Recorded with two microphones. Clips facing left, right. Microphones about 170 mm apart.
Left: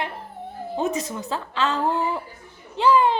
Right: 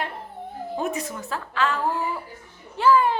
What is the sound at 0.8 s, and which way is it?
Speech, 20° left (ahead or behind).